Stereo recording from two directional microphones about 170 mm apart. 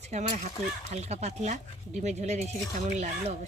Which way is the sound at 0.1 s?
45° right (ahead or behind).